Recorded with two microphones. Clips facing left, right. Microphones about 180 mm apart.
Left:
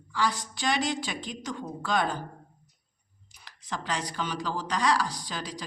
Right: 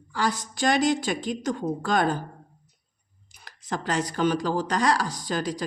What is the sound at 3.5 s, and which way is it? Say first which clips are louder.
Speech: right 5 dB; 45° right (ahead or behind).